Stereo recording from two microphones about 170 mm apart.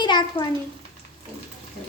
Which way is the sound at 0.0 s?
25° left (ahead or behind).